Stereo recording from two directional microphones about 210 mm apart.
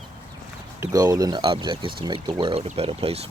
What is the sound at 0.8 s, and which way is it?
Speech, 15° right (ahead or behind).